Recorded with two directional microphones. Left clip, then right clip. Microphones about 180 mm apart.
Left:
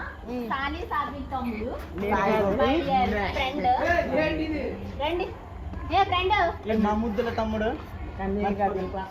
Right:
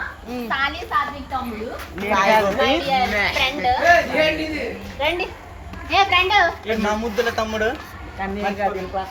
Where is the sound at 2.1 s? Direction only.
50° right (ahead or behind).